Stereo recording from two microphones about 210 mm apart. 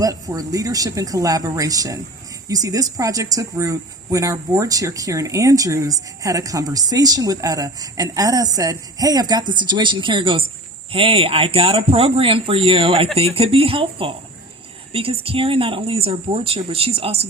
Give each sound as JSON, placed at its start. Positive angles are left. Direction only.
{"t": 0.0, "sound": "speech", "side_deg": -15}